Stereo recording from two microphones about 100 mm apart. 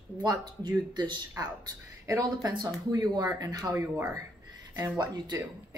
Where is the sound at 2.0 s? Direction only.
35° right (ahead or behind).